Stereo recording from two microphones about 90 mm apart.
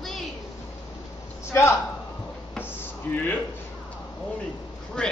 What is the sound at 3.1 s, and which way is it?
Speech, 20° left (ahead or behind).